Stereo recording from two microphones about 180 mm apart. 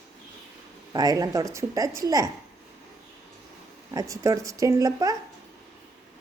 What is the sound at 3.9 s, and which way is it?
Speech, 20° right (ahead or behind).